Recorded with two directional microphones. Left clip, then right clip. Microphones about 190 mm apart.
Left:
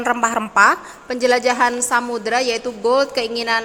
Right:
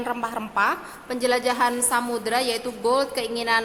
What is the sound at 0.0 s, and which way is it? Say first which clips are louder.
A woman's voice: left 9 dB; 30° left (ahead or behind).